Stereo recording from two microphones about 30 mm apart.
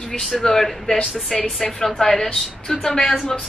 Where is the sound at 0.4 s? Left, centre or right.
Centre.